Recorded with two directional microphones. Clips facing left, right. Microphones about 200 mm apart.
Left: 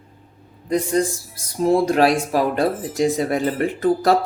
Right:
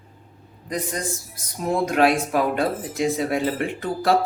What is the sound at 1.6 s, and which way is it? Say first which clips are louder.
Speech: left 3 dB; 35° left (ahead or behind).